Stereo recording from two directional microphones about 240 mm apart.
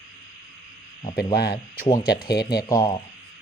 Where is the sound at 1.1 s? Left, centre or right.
Left.